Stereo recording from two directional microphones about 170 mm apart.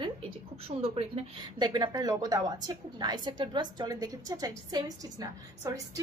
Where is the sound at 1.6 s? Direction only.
25° right (ahead or behind).